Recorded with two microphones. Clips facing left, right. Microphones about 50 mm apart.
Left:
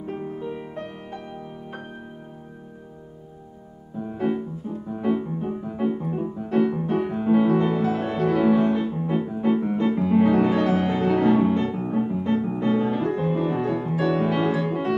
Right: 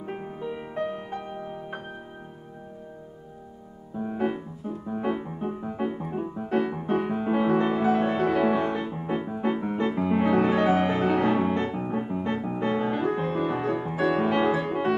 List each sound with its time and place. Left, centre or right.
0.0 s music: centre
4.0 s piano: centre
9.1 s music: centre